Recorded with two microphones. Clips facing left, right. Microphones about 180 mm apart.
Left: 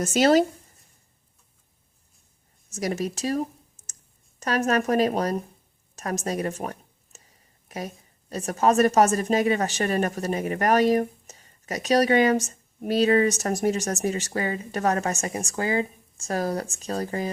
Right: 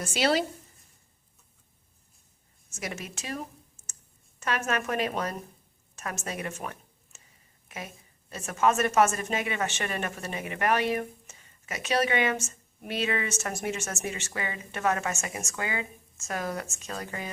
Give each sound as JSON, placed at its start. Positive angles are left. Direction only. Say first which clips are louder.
{"t": 0.0, "sound": "speech", "louder": "left 7 dB", "side_deg": 45}
{"t": 2.6, "sound": "a woman's voice", "louder": "left 10 dB", "side_deg": 35}
{"t": 3.8, "sound": "clicking", "louder": "even", "side_deg": 35}
{"t": 4.4, "sound": "a woman's voice", "louder": "left 6 dB", "side_deg": 40}